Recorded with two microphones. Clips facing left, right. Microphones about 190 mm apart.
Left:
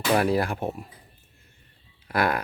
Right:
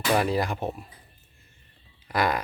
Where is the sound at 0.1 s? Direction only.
10° left (ahead or behind).